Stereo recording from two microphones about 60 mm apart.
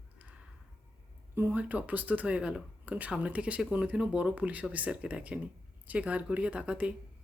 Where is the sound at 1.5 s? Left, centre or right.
Right.